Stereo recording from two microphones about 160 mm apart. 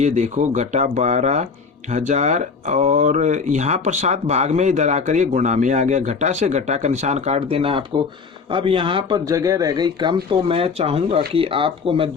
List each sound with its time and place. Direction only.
0.0 s speech: 45° right (ahead or behind); by 10.2 s 25° right (ahead or behind)
10.5 s speech: 35° right (ahead or behind)